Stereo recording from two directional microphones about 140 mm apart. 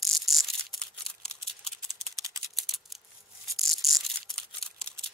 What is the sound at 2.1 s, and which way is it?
Typing, 25° right (ahead or behind).